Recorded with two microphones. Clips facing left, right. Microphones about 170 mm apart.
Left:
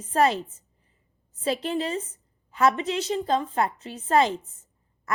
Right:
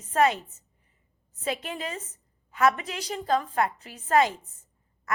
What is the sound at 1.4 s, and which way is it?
A woman's voice, 30° left (ahead or behind).